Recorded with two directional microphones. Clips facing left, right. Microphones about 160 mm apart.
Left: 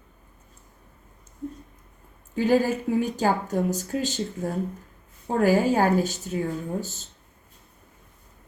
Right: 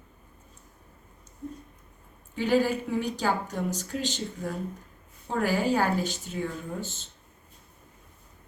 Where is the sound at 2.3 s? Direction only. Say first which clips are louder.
Left 3 dB; 45° left (ahead or behind).